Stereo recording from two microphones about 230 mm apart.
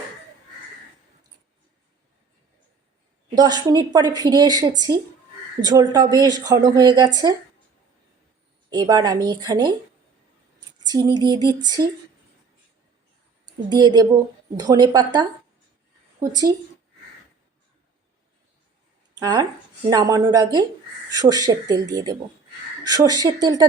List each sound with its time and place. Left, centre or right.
3.3 s speech: centre
8.7 s speech: centre
10.8 s speech: centre
13.4 s a woman's voice: centre
19.1 s speech: centre